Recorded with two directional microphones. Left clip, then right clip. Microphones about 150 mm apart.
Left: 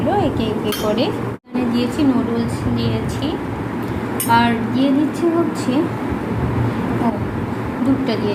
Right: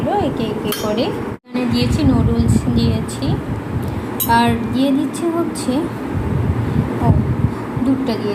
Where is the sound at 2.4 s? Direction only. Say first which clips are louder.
Right 2 dB; 25° right (ahead or behind).